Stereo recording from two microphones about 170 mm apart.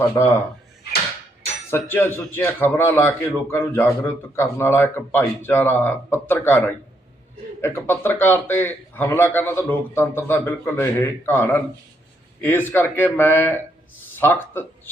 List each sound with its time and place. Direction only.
1.7 s a man's voice: 15° left (ahead or behind)